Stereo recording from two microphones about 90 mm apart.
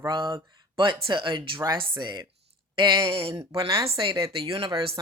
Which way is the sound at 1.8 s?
55° right (ahead or behind).